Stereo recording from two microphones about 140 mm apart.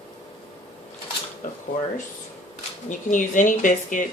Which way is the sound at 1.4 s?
70° left (ahead or behind).